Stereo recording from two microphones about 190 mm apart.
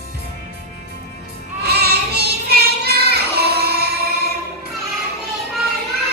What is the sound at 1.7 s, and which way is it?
Child singing, 55° right (ahead or behind).